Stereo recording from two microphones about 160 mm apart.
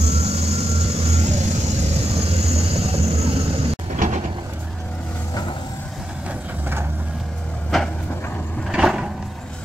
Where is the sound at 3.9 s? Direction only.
55° right (ahead or behind).